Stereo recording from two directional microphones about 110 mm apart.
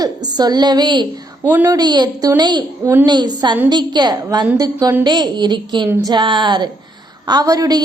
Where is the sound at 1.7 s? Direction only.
40° right (ahead or behind).